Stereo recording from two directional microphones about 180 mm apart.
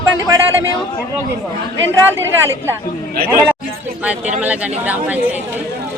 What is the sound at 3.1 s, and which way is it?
Speech, 55° right (ahead or behind).